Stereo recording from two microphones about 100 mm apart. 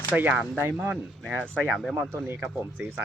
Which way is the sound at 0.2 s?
15° right (ahead or behind).